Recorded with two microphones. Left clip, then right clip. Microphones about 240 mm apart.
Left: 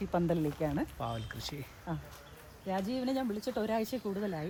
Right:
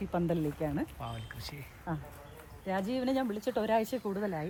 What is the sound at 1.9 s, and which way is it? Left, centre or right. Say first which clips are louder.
Speech: right 3 dB; centre.